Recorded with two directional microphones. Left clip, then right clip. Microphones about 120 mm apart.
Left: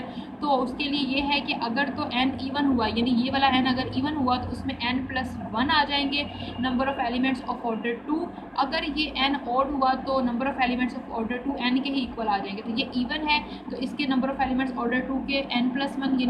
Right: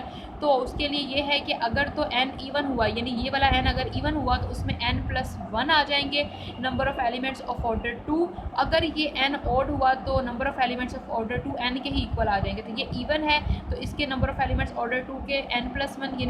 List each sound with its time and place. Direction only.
0.4 s a woman's voice: 50° right (ahead or behind)